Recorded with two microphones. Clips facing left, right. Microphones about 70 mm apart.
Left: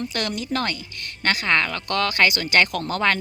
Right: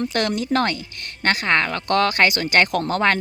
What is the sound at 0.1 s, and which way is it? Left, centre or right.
A woman's voice, right.